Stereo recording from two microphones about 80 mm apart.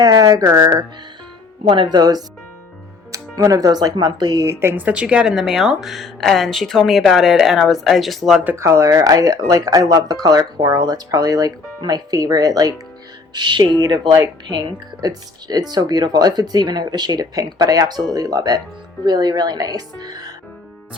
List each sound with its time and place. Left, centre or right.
0.0 s speech: right
1.6 s speech: right
3.1 s speech: right
4.4 s speech: right; by 8.4 s centre
8.5 s speech: right
13.3 s speech: right